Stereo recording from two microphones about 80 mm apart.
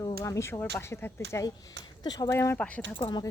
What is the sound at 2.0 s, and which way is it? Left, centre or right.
Speech, left.